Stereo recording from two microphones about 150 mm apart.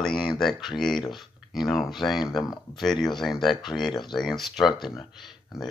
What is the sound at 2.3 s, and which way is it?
Speech, 25° left (ahead or behind).